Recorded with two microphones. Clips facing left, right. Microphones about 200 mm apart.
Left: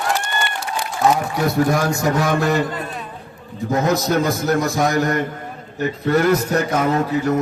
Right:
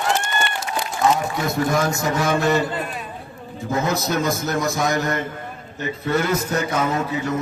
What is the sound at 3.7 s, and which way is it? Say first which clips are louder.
A man's voice: left 4 dB; 40° left (ahead or behind).